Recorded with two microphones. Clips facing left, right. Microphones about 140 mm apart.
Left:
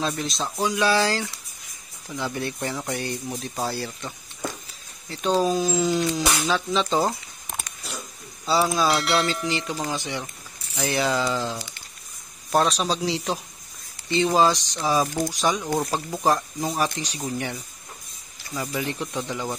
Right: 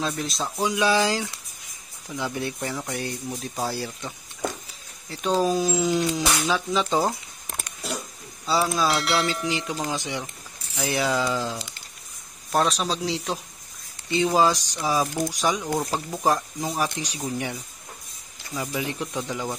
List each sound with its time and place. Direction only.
0.0 s speech: centre (ahead or behind)
0.6 s speech: 15° right (ahead or behind)
2.7 s speech: centre (ahead or behind)
3.6 s speech: 15° right (ahead or behind)
5.1 s speech: 5° right (ahead or behind)
9.5 s speech: 15° right (ahead or behind)
10.8 s speech: 5° right (ahead or behind)
16.3 s speech: 5° right (ahead or behind)